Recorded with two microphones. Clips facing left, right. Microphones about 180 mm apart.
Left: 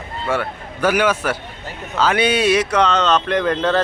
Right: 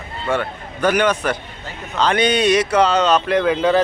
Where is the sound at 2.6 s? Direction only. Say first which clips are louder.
Right 1 dB; 5° right (ahead or behind).